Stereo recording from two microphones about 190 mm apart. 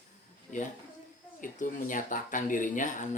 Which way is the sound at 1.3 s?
45° left (ahead or behind).